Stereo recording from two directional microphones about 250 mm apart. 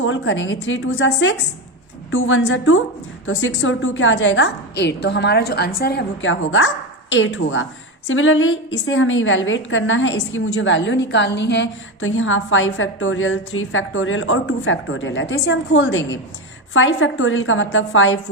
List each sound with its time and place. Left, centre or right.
0.0 s a woman's voice: left